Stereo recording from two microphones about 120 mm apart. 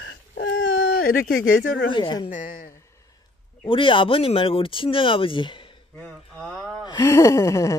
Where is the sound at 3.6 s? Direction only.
45° left (ahead or behind).